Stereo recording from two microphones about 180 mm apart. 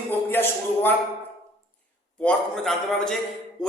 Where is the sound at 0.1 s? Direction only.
10° left (ahead or behind).